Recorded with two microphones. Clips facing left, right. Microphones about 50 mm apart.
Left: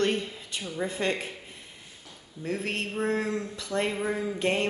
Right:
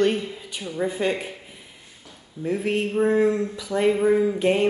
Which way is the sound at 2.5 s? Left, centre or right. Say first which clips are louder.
Right 7 dB; centre.